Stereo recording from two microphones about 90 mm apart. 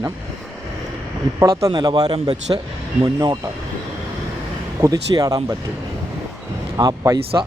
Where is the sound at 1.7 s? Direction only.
55° right (ahead or behind); by 2.6 s 90° right.